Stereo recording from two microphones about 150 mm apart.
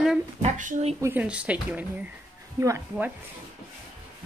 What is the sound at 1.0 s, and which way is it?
A woman's voice, 15° right (ahead or behind).